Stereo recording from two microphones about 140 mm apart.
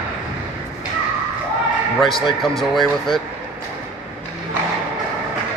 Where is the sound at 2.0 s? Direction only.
Centre (ahead or behind).